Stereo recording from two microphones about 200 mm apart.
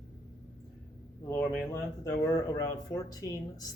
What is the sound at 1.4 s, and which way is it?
Speech, 5° left (ahead or behind).